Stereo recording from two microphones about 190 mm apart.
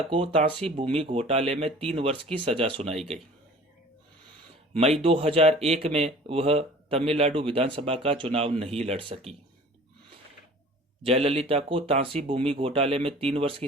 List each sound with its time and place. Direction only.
0.1 s speech: 30° right (ahead or behind)
4.7 s speech: 30° right (ahead or behind)
11.0 s speech: 30° right (ahead or behind)